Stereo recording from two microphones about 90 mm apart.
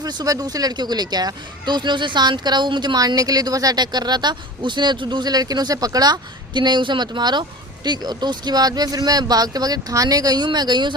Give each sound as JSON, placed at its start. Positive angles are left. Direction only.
{"t": 0.0, "sound": "speech", "side_deg": -50}